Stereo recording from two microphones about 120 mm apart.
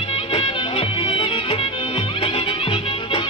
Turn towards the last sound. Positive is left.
turn(degrees=50)  # may be behind; listen again after turning